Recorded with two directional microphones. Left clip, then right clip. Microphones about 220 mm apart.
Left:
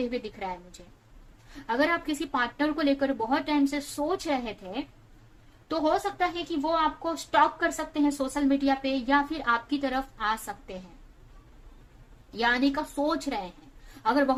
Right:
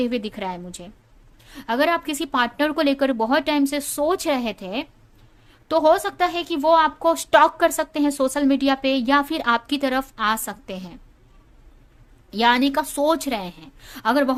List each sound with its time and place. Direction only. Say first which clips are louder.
0.0 s a woman's voice: right 7 dB; 45° right (ahead or behind)
12.3 s a woman's voice: right 7 dB; 45° right (ahead or behind)